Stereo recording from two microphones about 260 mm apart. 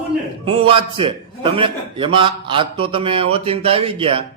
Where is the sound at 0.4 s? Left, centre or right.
Centre.